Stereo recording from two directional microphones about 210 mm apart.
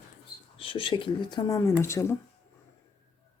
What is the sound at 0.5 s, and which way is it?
Speech, 25° left (ahead or behind).